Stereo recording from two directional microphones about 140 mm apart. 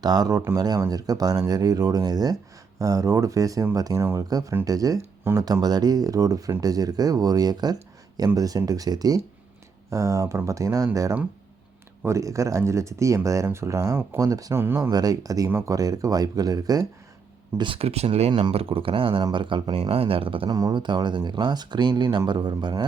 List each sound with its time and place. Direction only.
0.0 s speech: 30° right (ahead or behind)
17.6 s speech: 40° right (ahead or behind)